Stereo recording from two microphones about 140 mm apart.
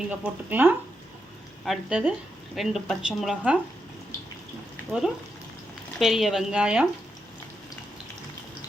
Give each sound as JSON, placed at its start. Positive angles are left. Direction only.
{"t": 0.1, "sound": "speech", "side_deg": -10}
{"t": 4.9, "sound": "speech", "side_deg": -5}